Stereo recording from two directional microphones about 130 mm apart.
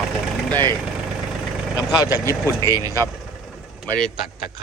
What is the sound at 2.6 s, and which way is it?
Speech, 30° right (ahead or behind).